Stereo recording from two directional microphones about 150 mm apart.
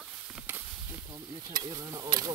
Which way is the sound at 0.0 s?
10° right (ahead or behind).